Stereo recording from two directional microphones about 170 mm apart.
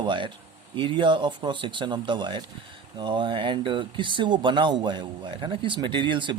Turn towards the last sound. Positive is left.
turn(degrees=-30)  # may be behind; listen again after turning